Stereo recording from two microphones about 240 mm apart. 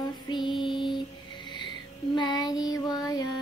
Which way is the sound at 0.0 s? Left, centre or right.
Centre.